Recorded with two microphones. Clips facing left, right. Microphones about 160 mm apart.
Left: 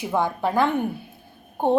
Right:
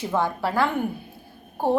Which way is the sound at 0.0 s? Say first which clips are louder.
Left 1 dB; 15° left (ahead or behind).